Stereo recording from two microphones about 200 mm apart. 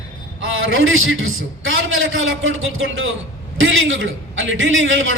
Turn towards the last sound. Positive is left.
turn(degrees=-75)  # may be behind; listen again after turning